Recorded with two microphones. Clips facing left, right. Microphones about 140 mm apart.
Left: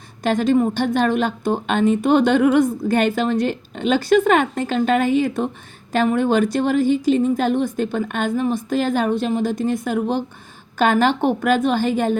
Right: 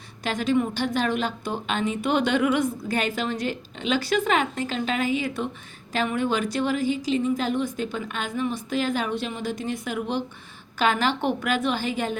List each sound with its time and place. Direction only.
0.2 s speech: 50° left (ahead or behind)